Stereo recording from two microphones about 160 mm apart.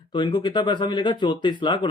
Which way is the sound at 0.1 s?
30° left (ahead or behind).